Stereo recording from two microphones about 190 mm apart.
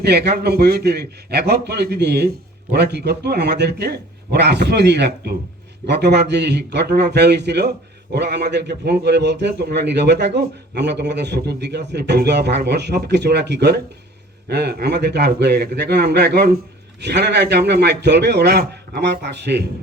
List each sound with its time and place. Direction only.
0.0 s a man's voice: 60° right (ahead or behind)